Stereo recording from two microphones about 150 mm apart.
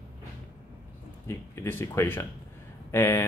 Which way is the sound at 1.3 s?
15° left (ahead or behind).